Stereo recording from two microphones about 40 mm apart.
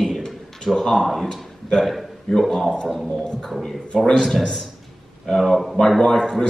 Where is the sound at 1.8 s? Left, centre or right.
Centre.